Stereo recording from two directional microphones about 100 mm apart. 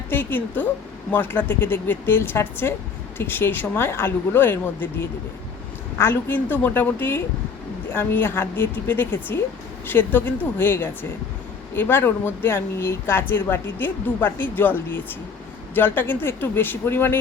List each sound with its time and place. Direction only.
0.1 s speech: 20° left (ahead or behind)